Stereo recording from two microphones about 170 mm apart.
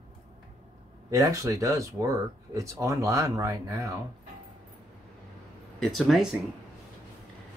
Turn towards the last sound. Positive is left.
turn(degrees=0)  # may be behind; listen again after turning